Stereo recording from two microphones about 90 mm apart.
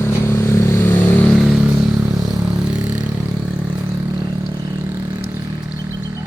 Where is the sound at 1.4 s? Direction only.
5° right (ahead or behind).